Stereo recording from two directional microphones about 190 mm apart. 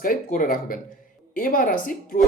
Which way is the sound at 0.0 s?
45° left (ahead or behind).